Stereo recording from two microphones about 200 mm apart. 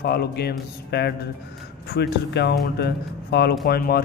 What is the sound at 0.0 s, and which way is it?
A man's voice, 50° left (ahead or behind).